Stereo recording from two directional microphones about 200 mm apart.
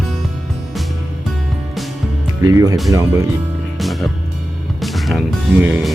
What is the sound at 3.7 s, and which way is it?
Music, centre (ahead or behind).